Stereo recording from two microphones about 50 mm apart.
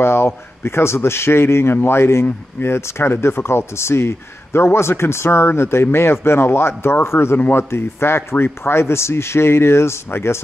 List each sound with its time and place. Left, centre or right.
0.0 s speech: left